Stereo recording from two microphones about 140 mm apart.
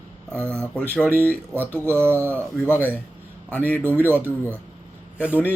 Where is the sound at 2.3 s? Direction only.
15° left (ahead or behind).